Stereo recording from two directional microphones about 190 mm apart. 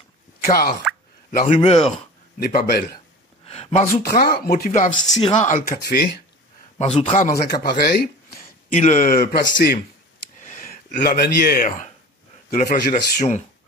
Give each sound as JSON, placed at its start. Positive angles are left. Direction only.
{"t": 0.5, "sound": "speech", "side_deg": 50}
{"t": 2.3, "sound": "speech", "side_deg": 50}
{"t": 3.5, "sound": "speech", "side_deg": 40}
{"t": 4.9, "sound": "speech", "side_deg": 25}
{"t": 5.4, "sound": "speech", "side_deg": 45}
{"t": 6.8, "sound": "speech", "side_deg": 30}
{"t": 7.2, "sound": "speech", "side_deg": 50}
{"t": 8.8, "sound": "speech", "side_deg": 45}